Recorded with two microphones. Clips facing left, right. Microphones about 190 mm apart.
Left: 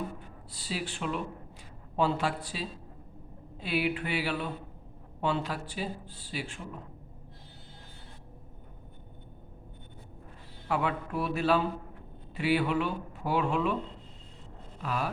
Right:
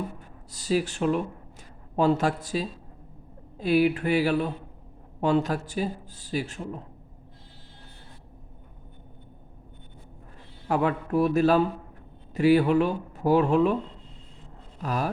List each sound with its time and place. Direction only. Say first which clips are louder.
0.5 s speech: right 11 dB; 45° right (ahead or behind)
10.7 s speech: right 6 dB; 45° right (ahead or behind)
14.8 s speech: right 4 dB; 40° right (ahead or behind)